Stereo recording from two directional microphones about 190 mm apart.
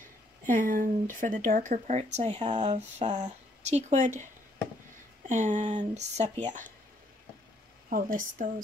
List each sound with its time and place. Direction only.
0.5 s a woman's voice: 45° right (ahead or behind)
5.3 s speech: 40° right (ahead or behind)
7.9 s a woman's voice: 45° right (ahead or behind)